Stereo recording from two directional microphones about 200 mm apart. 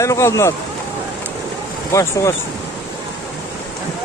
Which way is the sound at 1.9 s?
15° left (ahead or behind).